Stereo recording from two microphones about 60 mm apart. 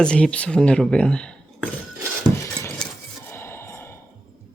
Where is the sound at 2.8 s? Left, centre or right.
Centre.